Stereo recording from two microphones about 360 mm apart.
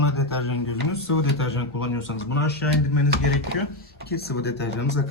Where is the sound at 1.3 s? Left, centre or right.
Left.